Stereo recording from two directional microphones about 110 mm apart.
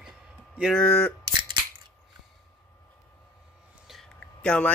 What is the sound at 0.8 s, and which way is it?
Speech, 10° left (ahead or behind).